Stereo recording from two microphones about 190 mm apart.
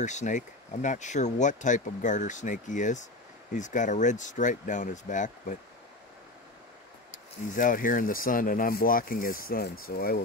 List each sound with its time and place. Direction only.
0.0 s speech: 40° left (ahead or behind)
7.1 s speech: 45° left (ahead or behind)